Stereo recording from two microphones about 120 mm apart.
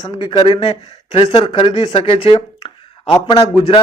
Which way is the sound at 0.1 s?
40° left (ahead or behind).